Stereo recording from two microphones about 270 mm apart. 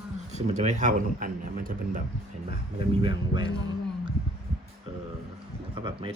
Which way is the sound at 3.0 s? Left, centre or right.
Centre.